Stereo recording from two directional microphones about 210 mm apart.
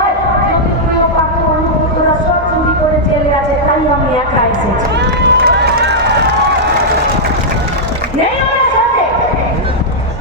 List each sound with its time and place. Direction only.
5.2 s run: 55° right (ahead or behind)